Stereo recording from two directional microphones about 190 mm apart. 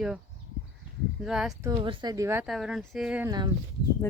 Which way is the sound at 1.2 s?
Centre (ahead or behind).